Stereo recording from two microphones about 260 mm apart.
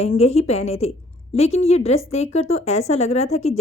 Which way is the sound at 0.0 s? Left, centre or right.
Left.